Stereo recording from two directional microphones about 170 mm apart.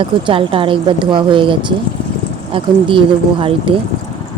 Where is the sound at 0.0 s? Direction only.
30° right (ahead or behind).